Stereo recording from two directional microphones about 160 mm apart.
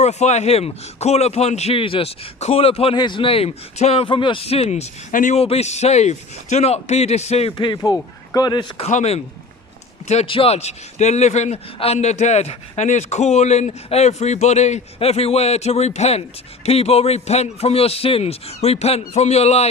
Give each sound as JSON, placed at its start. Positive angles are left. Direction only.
{"t": 0.0, "sound": "speech", "side_deg": 45}
{"t": 8.8, "sound": "a man's voice", "side_deg": 45}